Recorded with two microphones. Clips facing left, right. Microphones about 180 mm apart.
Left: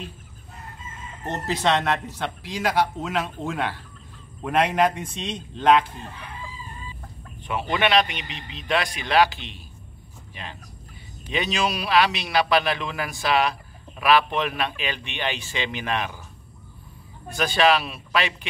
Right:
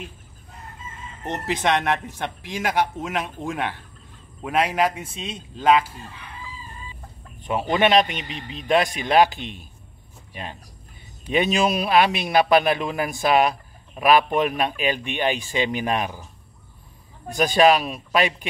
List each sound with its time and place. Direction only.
1.2 s a man's voice: 20° right (ahead or behind)
4.4 s a man's voice: 5° right (ahead or behind)
7.4 s speech: 40° right (ahead or behind)
17.3 s speech: 45° right (ahead or behind)